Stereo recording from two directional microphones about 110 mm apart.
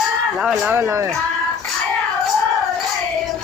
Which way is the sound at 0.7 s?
25° right (ahead or behind).